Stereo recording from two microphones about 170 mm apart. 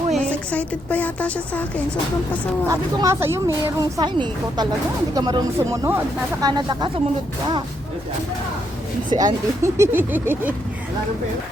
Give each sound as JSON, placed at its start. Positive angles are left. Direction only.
{"t": 0.1, "sound": "a woman's voice", "side_deg": 10}
{"t": 2.6, "sound": "speech", "side_deg": -15}
{"t": 9.0, "sound": "speech", "side_deg": -25}
{"t": 9.7, "sound": "vehicle", "side_deg": -15}